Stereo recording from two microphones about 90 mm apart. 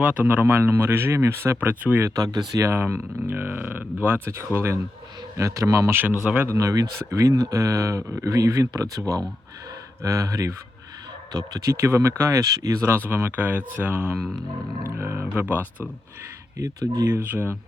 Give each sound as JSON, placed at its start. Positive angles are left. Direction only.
{"t": 0.0, "sound": "speech", "side_deg": -15}
{"t": 2.0, "sound": "speech", "side_deg": -45}
{"t": 2.6, "sound": "speech", "side_deg": -30}
{"t": 6.2, "sound": "speech", "side_deg": -15}
{"t": 6.5, "sound": "speech", "side_deg": -35}
{"t": 11.7, "sound": "speech", "side_deg": -30}
{"t": 13.1, "sound": "speech", "side_deg": -20}
{"t": 16.6, "sound": "speech", "side_deg": -40}